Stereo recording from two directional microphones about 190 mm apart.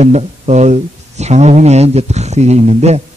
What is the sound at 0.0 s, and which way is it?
Speech, 35° right (ahead or behind).